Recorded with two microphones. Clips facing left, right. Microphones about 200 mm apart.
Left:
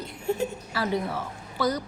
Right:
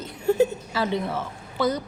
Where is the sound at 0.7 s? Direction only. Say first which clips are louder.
Right 2 dB; 25° right (ahead or behind).